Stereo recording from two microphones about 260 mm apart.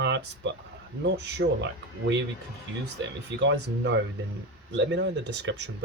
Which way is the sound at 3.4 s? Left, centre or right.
Right.